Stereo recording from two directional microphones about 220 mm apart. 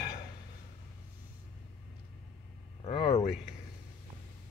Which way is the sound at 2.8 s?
25° left (ahead or behind).